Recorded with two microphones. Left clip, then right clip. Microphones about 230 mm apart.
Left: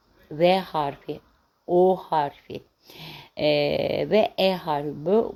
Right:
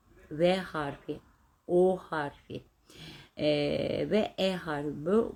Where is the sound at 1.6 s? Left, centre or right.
Left.